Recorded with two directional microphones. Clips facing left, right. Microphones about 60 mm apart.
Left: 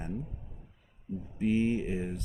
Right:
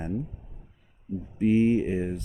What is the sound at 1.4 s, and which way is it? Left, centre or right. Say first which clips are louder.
Speech: right 7 dB; right.